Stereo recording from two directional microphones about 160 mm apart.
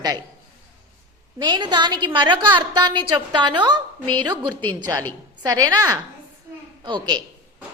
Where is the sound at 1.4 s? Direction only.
25° right (ahead or behind).